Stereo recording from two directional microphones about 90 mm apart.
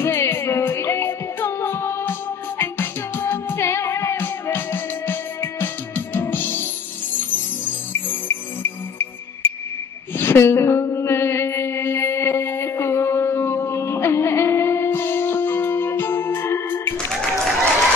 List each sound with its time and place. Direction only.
0.0 s music: 25° left (ahead or behind)
10.1 s mantra: 25° left (ahead or behind)
17.1 s applause: 5° left (ahead or behind)